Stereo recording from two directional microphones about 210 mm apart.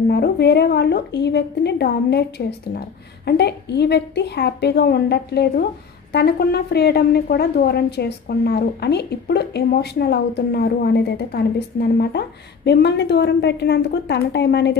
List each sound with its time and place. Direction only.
0.1 s a woman's voice: 50° left (ahead or behind)